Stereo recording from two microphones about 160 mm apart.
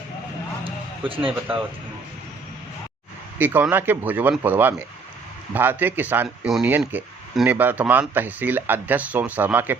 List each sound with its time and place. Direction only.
0.6 s music: 35° right (ahead or behind)
3.3 s speech: 10° right (ahead or behind)